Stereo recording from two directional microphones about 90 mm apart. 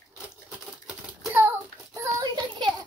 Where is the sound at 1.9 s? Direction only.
40° right (ahead or behind).